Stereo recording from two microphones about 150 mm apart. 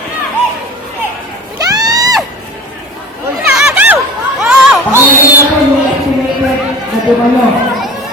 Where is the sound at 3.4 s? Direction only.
5° right (ahead or behind).